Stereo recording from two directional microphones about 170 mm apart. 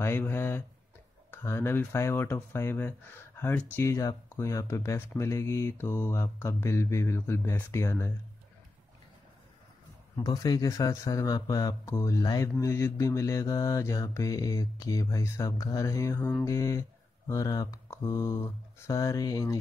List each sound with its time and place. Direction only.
0.0 s speech: 15° left (ahead or behind)
10.2 s speech: 20° left (ahead or behind)